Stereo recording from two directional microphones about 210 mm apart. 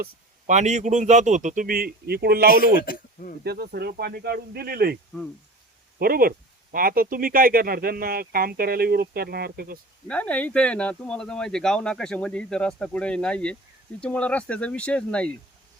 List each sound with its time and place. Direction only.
0.0 s speech: 35° right (ahead or behind)
2.8 s speech: 40° left (ahead or behind)
3.4 s speech: 50° right (ahead or behind)
6.0 s speech: 45° right (ahead or behind)
10.1 s speech: 5° left (ahead or behind)